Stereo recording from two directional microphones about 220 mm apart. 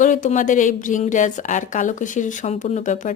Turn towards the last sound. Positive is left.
turn(degrees=35)  # may be behind; listen again after turning